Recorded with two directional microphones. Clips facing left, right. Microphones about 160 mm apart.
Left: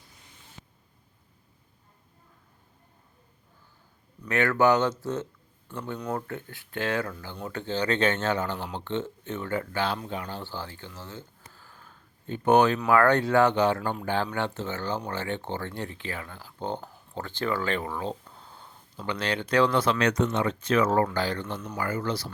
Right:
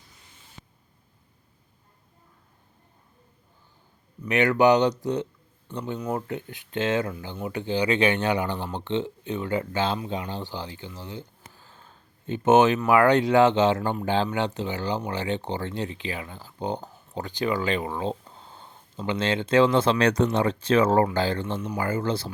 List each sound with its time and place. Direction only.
4.3 s speech: 15° right (ahead or behind)